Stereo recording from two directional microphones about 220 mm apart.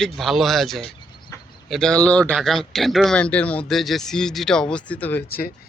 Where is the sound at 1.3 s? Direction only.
15° left (ahead or behind).